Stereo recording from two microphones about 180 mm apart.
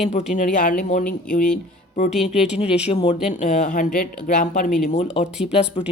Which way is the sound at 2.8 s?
40° left (ahead or behind).